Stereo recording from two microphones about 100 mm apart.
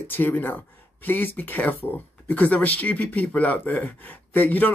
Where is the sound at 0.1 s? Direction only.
20° left (ahead or behind).